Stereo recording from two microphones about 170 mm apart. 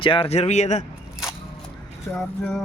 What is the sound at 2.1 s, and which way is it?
Speech, 10° left (ahead or behind).